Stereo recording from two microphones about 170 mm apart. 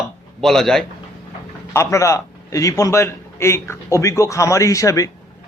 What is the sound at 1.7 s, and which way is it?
A man's voice, 20° left (ahead or behind).